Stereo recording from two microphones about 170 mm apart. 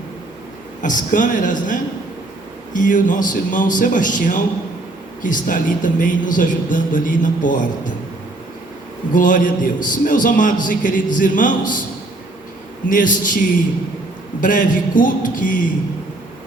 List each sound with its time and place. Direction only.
0.8 s a man's voice: 50° left (ahead or behind)
9.1 s a man's voice: 50° left (ahead or behind)
12.9 s a man's voice: 50° left (ahead or behind)
14.4 s a man's voice: 50° left (ahead or behind)